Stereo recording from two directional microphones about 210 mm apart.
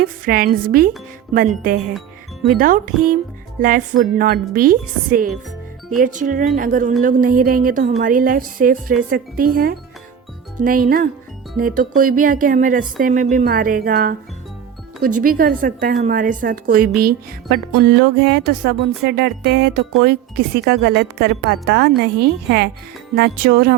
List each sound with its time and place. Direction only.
0.0 s a woman's voice: 45° right (ahead or behind)